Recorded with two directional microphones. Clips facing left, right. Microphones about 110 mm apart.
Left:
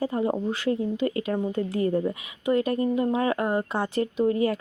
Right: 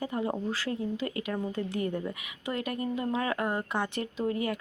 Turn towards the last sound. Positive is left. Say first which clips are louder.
# left 7 dB
turn(degrees=30)  # may be behind; listen again after turning